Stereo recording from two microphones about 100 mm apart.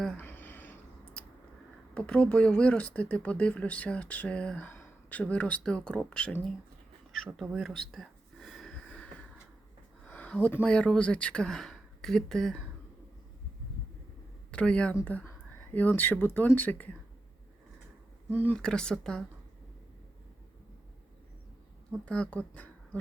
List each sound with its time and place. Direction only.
0.2 s a sound: 20° left (ahead or behind)
2.0 s speech: 10° left (ahead or behind)
7.3 s a sound: centre (ahead or behind)
10.1 s speech: 15° left (ahead or behind)
14.5 s speech: 10° left (ahead or behind)
18.5 s speech: 10° left (ahead or behind)
22.0 s speech: 10° left (ahead or behind)